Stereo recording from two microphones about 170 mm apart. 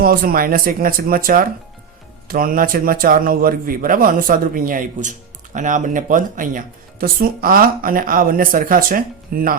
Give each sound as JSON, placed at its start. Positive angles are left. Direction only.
{"t": 0.0, "sound": "speech", "side_deg": -60}